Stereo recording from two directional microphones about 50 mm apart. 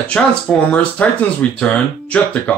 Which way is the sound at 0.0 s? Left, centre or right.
Left.